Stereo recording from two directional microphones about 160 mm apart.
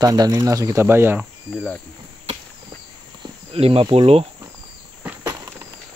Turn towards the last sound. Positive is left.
turn(degrees=-10)  # may be behind; listen again after turning